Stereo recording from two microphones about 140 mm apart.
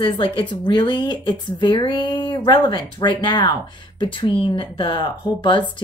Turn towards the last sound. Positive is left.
turn(degrees=35)  # may be behind; listen again after turning